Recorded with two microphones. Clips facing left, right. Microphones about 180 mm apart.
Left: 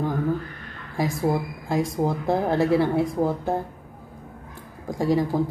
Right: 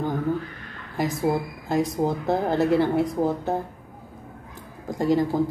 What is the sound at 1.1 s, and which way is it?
Speech, centre (ahead or behind).